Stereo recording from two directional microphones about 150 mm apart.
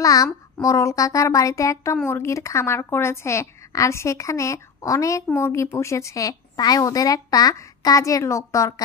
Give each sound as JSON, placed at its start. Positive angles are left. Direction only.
{"t": 0.0, "sound": "a woman's voice", "side_deg": 25}